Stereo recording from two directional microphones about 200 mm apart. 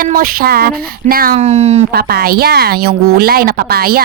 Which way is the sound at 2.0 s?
50° right (ahead or behind).